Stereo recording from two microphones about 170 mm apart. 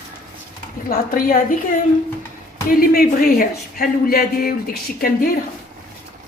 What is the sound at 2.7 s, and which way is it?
Speech, 60° left (ahead or behind).